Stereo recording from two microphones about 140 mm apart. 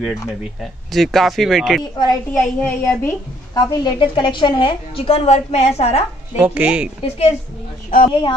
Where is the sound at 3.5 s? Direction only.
30° left (ahead or behind); by 6.0 s 50° left (ahead or behind).